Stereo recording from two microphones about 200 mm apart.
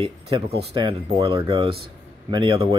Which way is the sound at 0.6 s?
25° right (ahead or behind).